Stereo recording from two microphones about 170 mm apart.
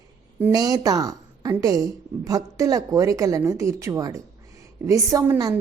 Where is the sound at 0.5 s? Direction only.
20° right (ahead or behind).